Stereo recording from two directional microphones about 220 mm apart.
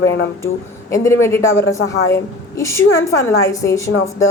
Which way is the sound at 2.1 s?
15° left (ahead or behind).